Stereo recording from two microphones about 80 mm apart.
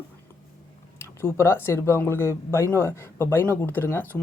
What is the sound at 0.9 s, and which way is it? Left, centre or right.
Speech, left.